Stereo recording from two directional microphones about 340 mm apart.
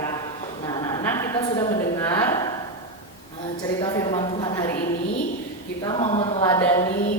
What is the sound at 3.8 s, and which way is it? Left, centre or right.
Speech, centre.